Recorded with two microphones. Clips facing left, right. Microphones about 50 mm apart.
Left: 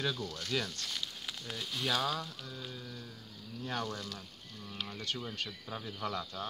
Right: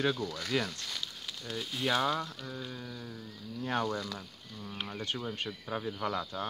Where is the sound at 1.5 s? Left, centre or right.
Centre.